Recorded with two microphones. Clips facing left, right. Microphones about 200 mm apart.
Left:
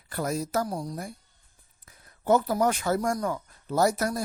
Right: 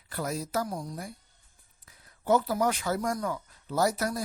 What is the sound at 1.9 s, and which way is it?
Speech, 50° left (ahead or behind).